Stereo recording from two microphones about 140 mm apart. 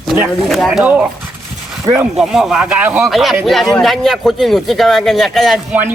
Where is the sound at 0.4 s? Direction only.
Centre (ahead or behind).